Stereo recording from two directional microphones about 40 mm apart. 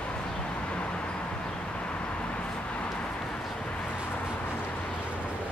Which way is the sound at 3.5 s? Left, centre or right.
Left.